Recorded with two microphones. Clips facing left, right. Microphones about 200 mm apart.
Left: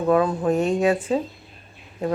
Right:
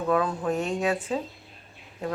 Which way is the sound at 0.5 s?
10° left (ahead or behind).